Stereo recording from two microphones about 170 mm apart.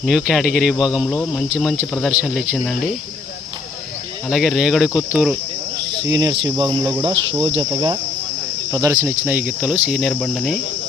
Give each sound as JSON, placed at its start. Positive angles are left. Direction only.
{"t": 0.0, "sound": "speech", "side_deg": 0}
{"t": 4.3, "sound": "speech", "side_deg": 0}
{"t": 6.1, "sound": "cricket", "side_deg": -25}
{"t": 9.2, "sound": "speech", "side_deg": -10}